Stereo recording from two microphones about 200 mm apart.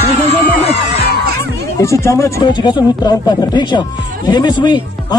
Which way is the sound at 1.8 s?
15° left (ahead or behind).